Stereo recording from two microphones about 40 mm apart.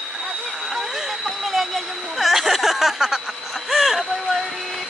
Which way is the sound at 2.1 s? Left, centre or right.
Centre.